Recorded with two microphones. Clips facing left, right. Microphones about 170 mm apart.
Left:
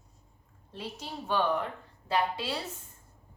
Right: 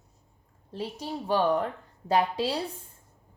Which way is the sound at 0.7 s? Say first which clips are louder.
Right 6 dB; 35° right (ahead or behind).